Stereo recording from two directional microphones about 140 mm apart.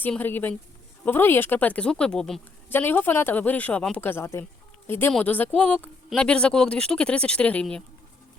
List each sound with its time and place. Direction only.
0.0 s speech: 15° left (ahead or behind)
2.6 s speech: 15° left (ahead or behind)